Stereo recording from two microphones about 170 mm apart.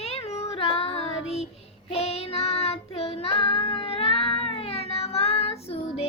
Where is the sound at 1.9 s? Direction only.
35° left (ahead or behind).